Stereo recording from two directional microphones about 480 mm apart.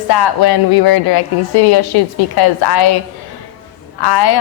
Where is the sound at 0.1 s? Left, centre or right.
Left.